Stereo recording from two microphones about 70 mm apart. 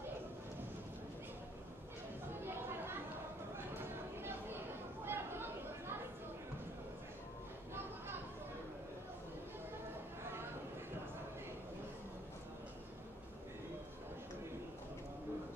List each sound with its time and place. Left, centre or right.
2.4 s chatter: right
3.5 s a sound: right
5.0 s chatter: right